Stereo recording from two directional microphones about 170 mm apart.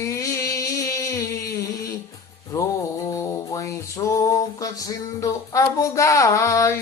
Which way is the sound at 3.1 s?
20° left (ahead or behind).